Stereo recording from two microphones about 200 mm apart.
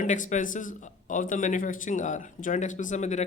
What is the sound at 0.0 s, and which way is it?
Speech, 40° left (ahead or behind).